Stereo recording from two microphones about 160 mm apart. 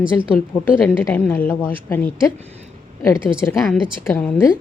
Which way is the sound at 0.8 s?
10° left (ahead or behind).